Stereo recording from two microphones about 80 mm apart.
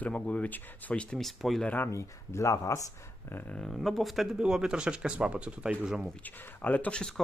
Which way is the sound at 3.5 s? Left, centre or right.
Centre.